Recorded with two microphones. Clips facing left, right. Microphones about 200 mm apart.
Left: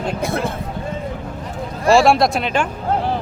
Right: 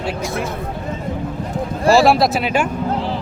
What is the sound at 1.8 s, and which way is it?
Speech, centre (ahead or behind).